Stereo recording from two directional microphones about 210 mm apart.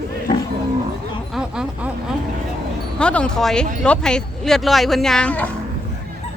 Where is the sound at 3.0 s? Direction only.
5° left (ahead or behind).